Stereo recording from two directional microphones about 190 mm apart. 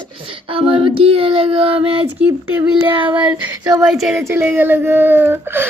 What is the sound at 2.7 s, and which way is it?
Speech, 25° right (ahead or behind).